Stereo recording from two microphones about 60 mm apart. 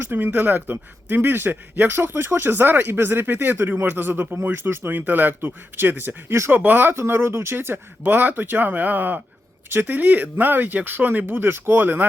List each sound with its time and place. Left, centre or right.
0.0 s speech: right
6.9 s speech: right